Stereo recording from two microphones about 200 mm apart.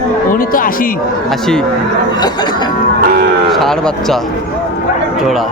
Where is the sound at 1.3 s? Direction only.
Centre (ahead or behind).